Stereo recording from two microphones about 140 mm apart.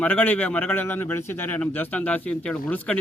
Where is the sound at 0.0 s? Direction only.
10° left (ahead or behind).